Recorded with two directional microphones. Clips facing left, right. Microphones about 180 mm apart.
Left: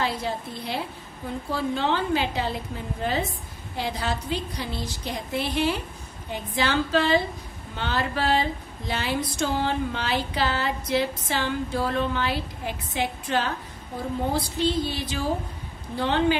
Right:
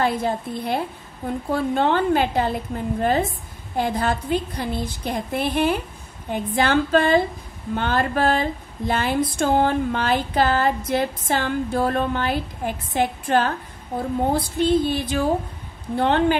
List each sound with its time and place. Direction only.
0.0 s speech: 50° right (ahead or behind)